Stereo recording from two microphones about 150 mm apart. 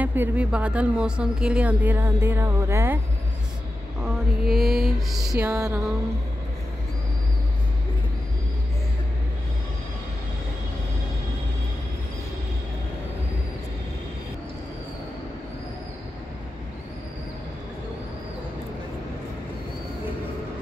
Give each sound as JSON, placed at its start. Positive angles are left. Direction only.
{"t": 0.0, "sound": "speech", "side_deg": -10}
{"t": 4.0, "sound": "a sound", "side_deg": 0}
{"t": 5.5, "sound": "music", "side_deg": -20}